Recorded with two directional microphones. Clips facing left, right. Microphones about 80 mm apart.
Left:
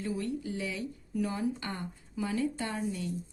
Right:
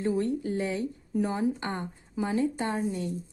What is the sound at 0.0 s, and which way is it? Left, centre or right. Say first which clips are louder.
A woman's voice: right 7 dB; right.